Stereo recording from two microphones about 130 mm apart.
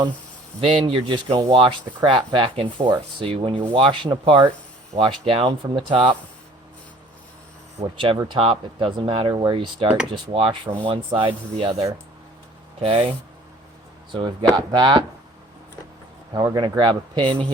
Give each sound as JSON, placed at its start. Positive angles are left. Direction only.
{"t": 0.6, "sound": "speech", "side_deg": -45}
{"t": 7.9, "sound": "speech", "side_deg": -40}
{"t": 14.1, "sound": "speech", "side_deg": -35}
{"t": 16.3, "sound": "speech", "side_deg": -30}